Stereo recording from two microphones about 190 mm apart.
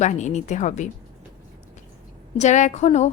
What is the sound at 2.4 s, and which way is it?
Speech, 40° left (ahead or behind).